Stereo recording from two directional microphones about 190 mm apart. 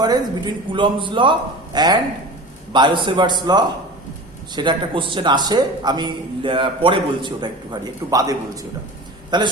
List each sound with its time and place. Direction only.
0.0 s a man's voice: 20° right (ahead or behind)